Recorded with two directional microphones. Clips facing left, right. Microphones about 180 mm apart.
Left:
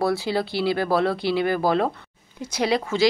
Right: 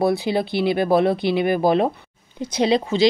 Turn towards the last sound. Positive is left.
turn(degrees=-25)  # may be behind; listen again after turning